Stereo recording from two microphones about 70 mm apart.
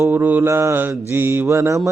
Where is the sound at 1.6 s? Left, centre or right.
Right.